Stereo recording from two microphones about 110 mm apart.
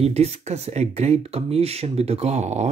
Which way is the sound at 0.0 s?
70° right (ahead or behind).